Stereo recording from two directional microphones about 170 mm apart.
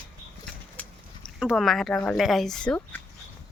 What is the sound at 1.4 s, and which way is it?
Speech, centre (ahead or behind).